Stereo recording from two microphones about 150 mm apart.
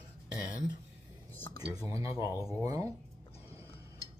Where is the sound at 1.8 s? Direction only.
20° right (ahead or behind).